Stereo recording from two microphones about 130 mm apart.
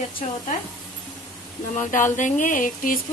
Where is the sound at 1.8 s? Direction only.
85° left.